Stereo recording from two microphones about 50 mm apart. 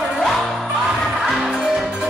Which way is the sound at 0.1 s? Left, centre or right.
Centre.